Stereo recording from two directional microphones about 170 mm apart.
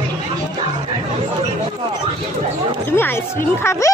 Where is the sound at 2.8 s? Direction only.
15° left (ahead or behind).